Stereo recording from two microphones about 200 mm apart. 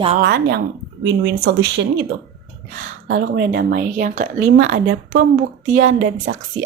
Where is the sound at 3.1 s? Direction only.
45° right (ahead or behind).